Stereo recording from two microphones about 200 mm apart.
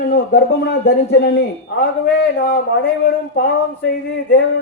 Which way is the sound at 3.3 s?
50° left (ahead or behind).